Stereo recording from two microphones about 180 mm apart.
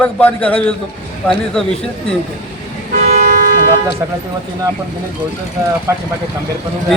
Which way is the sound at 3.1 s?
40° right (ahead or behind).